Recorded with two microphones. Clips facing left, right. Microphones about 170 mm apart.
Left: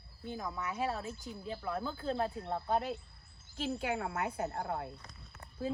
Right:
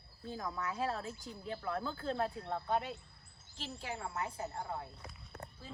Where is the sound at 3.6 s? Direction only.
60° left (ahead or behind).